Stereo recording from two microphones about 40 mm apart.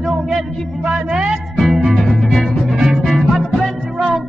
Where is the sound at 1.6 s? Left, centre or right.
Centre.